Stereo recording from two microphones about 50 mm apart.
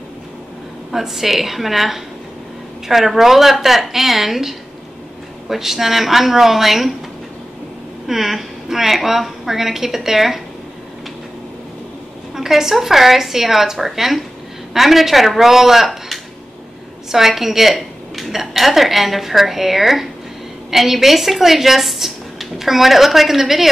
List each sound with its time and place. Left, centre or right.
0.9 s a woman's voice: centre
8.1 s a woman's voice: centre
12.4 s a woman's voice: centre